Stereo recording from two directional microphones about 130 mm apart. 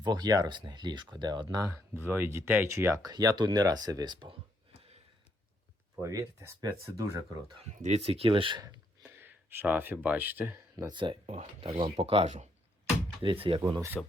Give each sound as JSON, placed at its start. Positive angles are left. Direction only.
{"t": 0.0, "sound": "speech", "side_deg": -30}
{"t": 1.9, "sound": "speech", "side_deg": -15}
{"t": 6.0, "sound": "speech", "side_deg": -25}
{"t": 7.7, "sound": "speech", "side_deg": -60}
{"t": 8.6, "sound": "a sound", "side_deg": -25}
{"t": 9.1, "sound": "speech", "side_deg": -15}
{"t": 10.8, "sound": "speech", "side_deg": -40}
{"t": 11.3, "sound": "speech", "side_deg": -55}
{"t": 13.2, "sound": "speech", "side_deg": -45}
{"t": 14.0, "sound": "speech", "side_deg": 10}